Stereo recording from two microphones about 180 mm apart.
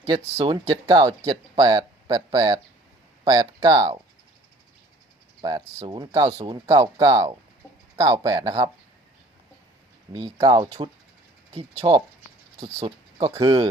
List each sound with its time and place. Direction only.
0.3 s speech: 25° right (ahead or behind)
5.4 s speech: 20° right (ahead or behind)
10.3 s speech: 25° right (ahead or behind)